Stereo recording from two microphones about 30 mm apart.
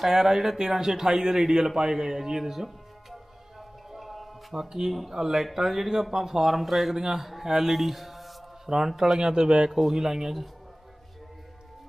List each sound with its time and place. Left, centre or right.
0.0 s a man's voice: centre
3.9 s music: centre
4.5 s a man's voice: centre
5.1 s a man's voice: centre
7.2 s a sound: centre
8.9 s a man's voice: centre
9.1 s a man's voice: right